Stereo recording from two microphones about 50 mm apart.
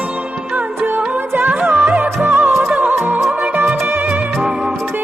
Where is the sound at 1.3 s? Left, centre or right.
Right.